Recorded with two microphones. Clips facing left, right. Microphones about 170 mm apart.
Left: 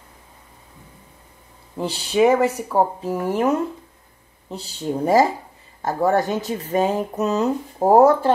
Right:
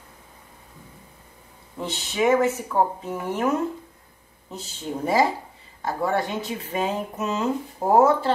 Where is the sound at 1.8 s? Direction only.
35° left (ahead or behind).